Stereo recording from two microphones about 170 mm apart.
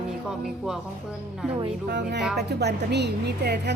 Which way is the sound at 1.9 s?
75° right (ahead or behind).